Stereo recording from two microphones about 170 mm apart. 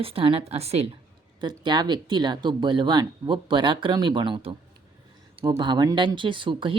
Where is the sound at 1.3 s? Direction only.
25° right (ahead or behind).